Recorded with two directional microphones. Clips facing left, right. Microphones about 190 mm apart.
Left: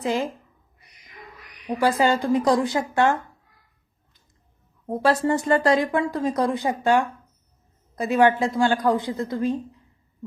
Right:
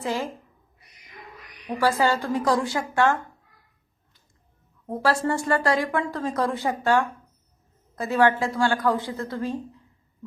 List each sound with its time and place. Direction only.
0.0 s speech: 15° left (ahead or behind)
1.6 s speech: 15° left (ahead or behind)
4.9 s speech: 20° left (ahead or behind)